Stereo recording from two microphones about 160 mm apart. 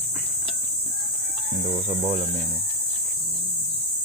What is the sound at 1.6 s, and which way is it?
Speech, 45° right (ahead or behind).